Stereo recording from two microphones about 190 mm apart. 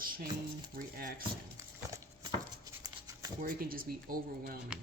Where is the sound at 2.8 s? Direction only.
20° right (ahead or behind).